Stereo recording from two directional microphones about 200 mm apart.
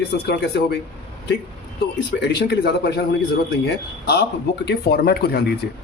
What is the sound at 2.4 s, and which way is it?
Speech, 55° left (ahead or behind).